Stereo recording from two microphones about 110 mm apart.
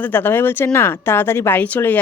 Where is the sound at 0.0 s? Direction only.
15° left (ahead or behind).